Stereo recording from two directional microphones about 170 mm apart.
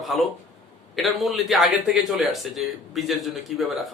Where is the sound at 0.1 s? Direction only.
Centre (ahead or behind).